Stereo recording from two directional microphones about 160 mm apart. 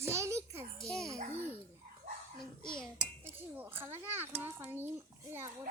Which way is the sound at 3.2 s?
15° right (ahead or behind).